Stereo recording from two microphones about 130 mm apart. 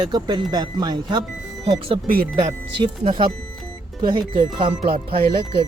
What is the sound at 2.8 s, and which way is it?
Speech, 40° right (ahead or behind).